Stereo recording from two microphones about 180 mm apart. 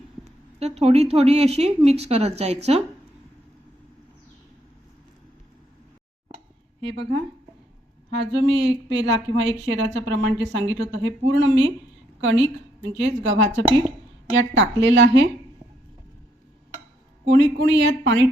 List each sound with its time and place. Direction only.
0.6 s speech: 35° right (ahead or behind)
6.9 s speech: 70° right (ahead or behind)
8.1 s a woman's voice: 60° right (ahead or behind)
8.4 s speech: 35° right (ahead or behind)
8.9 s a woman's voice: 85° right
17.2 s speech: 75° right (ahead or behind)